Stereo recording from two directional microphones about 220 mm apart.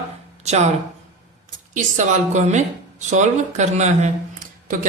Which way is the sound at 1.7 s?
35° right (ahead or behind).